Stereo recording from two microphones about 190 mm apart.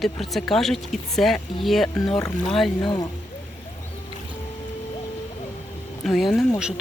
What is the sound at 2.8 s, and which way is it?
Speech, 20° left (ahead or behind).